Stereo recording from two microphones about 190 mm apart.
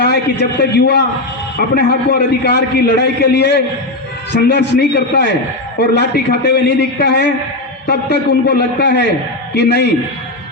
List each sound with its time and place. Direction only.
0.6 s a man's voice: 60° left (ahead or behind)